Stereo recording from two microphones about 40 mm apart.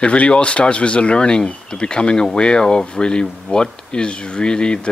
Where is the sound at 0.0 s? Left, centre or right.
Left.